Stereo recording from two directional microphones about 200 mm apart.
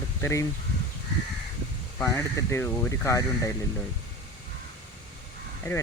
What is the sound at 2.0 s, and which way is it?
Speech, 15° left (ahead or behind).